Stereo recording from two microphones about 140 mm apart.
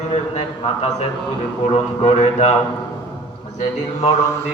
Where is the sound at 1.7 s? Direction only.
50° left (ahead or behind).